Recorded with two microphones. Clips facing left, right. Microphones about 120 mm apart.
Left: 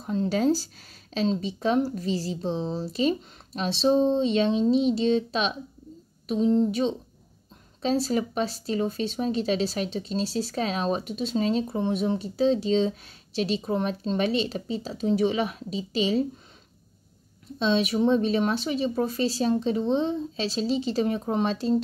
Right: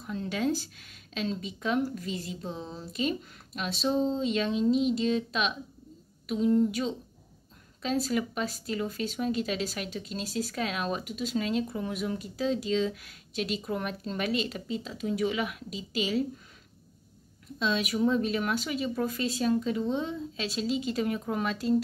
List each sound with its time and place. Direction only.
0.0 s a woman's voice: 35° left (ahead or behind)
17.6 s speech: 30° left (ahead or behind)